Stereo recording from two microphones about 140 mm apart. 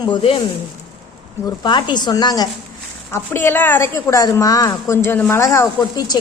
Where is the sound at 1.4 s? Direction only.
30° left (ahead or behind).